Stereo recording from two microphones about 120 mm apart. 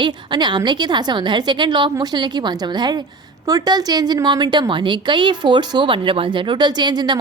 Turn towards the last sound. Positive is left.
turn(degrees=-35)  # may be behind; listen again after turning